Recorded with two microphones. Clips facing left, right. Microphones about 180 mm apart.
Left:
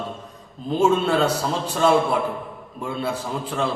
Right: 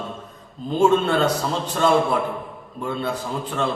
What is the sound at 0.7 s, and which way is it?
Speech, 5° left (ahead or behind).